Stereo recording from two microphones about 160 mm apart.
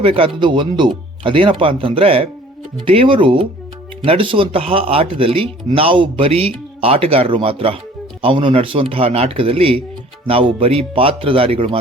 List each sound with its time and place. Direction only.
0.0 s speech: 35° right (ahead or behind)